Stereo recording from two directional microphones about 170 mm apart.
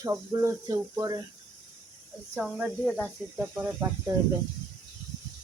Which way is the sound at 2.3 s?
Centre (ahead or behind).